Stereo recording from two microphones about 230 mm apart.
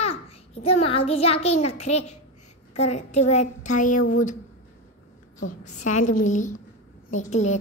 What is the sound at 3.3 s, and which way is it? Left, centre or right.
A woman's voice, left.